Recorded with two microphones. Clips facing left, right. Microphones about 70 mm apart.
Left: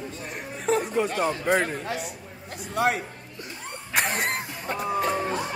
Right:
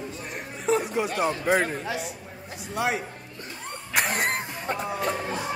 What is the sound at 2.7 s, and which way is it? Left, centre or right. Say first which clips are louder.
Speech: left 3 dB; left.